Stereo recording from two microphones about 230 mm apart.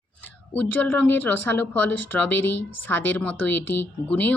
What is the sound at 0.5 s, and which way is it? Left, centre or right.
Speech, centre.